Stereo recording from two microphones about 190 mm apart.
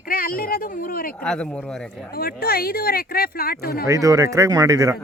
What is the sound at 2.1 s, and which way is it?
Speech, 50° left (ahead or behind).